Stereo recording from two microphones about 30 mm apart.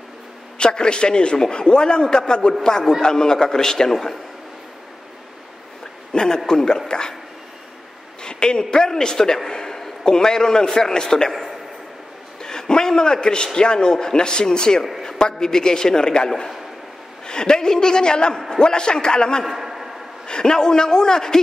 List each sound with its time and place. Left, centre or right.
0.6 s a man's voice: left; by 4.2 s centre
6.1 s a man's voice: left
6.9 s a sound: left
8.2 s a man's voice: left
12.4 s a sound: left
13.6 s speech: left
17.3 s speech: left
19.4 s a sound: centre
20.2 s speech: left